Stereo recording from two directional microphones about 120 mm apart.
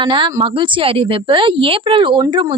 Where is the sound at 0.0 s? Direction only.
45° right (ahead or behind).